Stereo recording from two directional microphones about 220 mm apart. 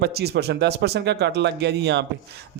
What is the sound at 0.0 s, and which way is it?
A man's voice, 45° right (ahead or behind).